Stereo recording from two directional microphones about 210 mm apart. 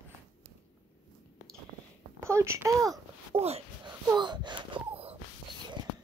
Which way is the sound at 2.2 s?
15° right (ahead or behind).